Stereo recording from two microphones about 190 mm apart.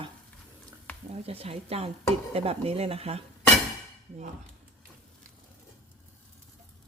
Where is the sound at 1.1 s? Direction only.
30° right (ahead or behind).